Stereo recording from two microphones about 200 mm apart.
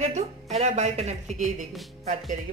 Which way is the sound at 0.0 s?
35° right (ahead or behind).